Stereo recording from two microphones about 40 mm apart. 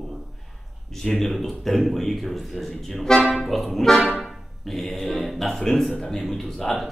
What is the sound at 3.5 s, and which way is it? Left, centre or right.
A man's voice, centre.